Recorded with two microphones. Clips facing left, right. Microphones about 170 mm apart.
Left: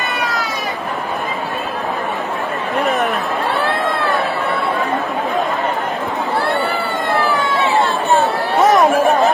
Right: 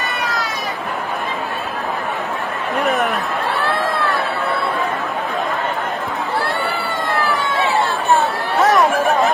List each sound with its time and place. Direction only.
2.8 s chatter: centre (ahead or behind)
8.6 s chatter: 20° left (ahead or behind)